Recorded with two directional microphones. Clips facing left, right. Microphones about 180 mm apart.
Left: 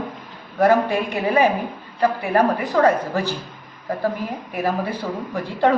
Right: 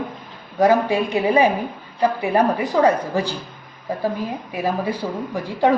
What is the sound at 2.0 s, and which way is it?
Speech, 15° right (ahead or behind).